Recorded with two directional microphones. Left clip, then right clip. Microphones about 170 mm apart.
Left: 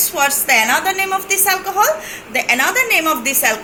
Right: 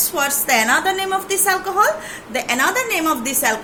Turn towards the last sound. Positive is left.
turn(degrees=-60)  # may be behind; listen again after turning